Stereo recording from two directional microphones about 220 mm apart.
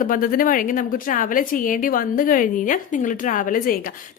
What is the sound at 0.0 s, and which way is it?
A woman's voice, 40° left (ahead or behind).